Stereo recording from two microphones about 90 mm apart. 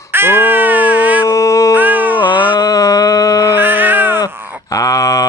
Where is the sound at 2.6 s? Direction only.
40° left (ahead or behind).